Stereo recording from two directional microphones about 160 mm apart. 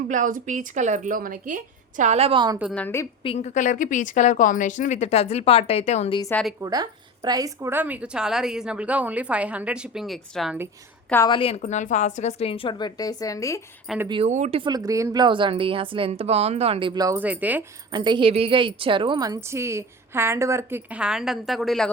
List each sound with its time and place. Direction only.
0.1 s a woman's voice: 55° right (ahead or behind); by 2.6 s 30° right (ahead or behind)
2.7 s a woman's voice: 15° left (ahead or behind)
3.2 s speech: 45° left (ahead or behind)
6.6 s a woman's voice: 20° right (ahead or behind); by 10.6 s centre (ahead or behind)
11.3 s a woman's voice: 35° left (ahead or behind)
11.6 s a woman's voice: 50° left (ahead or behind); by 13.6 s 20° left (ahead or behind)
13.9 s speech: centre (ahead or behind)
14.3 s a woman's voice: 45° right (ahead or behind)
14.6 s a woman's voice: 25° right (ahead or behind)
16.9 s speech: 20° right (ahead or behind)
17.2 s a woman's voice: 10° right (ahead or behind)
17.9 s a woman's voice: 30° right (ahead or behind); by 21.8 s centre (ahead or behind)